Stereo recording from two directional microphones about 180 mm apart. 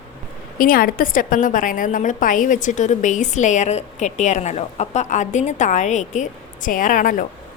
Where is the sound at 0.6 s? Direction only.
50° left (ahead or behind).